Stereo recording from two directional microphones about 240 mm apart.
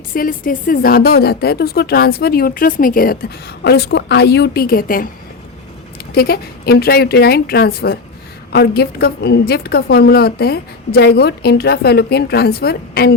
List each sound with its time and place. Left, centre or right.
0.1 s speech: left
6.1 s speech: left